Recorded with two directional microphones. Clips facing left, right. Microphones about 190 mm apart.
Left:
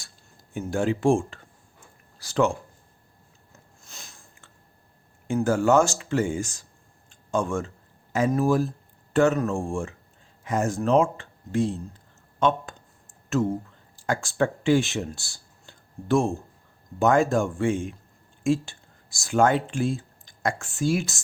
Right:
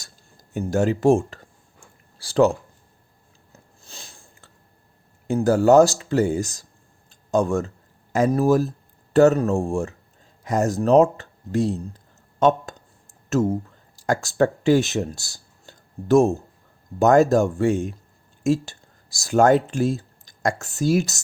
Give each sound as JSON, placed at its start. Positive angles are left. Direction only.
{"t": 0.0, "sound": "speech", "side_deg": -40}
{"t": 3.8, "sound": "biting", "side_deg": -30}
{"t": 5.3, "sound": "speech", "side_deg": -35}
{"t": 7.1, "sound": "a sound", "side_deg": -40}
{"t": 8.1, "sound": "speech", "side_deg": -40}